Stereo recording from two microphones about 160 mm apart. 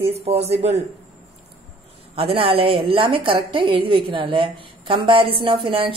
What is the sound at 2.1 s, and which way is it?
A woman's voice, 35° right (ahead or behind).